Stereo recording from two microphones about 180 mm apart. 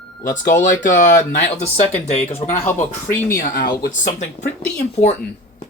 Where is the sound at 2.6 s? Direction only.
10° left (ahead or behind).